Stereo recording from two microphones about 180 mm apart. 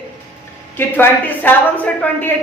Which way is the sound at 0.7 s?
10° left (ahead or behind).